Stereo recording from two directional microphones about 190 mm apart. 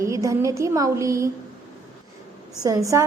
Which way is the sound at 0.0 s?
15° right (ahead or behind).